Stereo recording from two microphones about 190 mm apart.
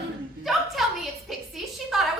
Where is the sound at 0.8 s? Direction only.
Centre (ahead or behind).